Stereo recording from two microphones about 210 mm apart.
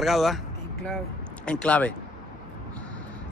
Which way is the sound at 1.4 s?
5° left (ahead or behind).